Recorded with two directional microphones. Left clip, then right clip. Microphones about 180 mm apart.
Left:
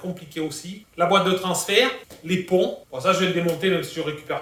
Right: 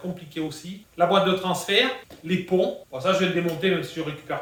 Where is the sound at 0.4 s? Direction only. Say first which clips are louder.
Left 3 dB; 10° left (ahead or behind).